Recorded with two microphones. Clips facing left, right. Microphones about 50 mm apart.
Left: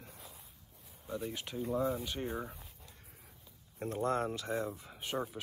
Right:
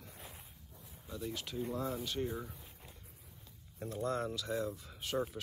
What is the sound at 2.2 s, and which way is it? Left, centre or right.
Speech, left.